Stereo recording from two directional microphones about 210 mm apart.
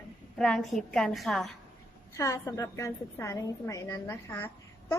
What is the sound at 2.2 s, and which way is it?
A woman's voice, 15° left (ahead or behind).